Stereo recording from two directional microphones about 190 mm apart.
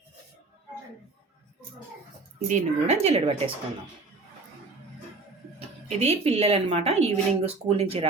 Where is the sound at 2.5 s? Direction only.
40° right (ahead or behind).